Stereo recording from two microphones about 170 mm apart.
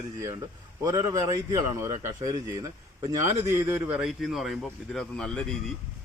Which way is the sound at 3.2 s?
15° right (ahead or behind).